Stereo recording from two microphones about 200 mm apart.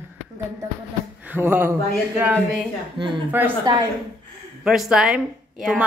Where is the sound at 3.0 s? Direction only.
25° right (ahead or behind).